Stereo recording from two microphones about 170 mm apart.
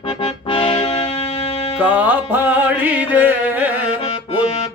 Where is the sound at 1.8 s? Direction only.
10° right (ahead or behind).